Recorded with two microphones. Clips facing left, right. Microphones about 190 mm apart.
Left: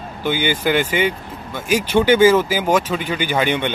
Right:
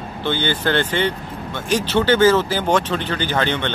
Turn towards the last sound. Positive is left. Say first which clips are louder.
# left 2 dB
turn(degrees=10)  # may be behind; listen again after turning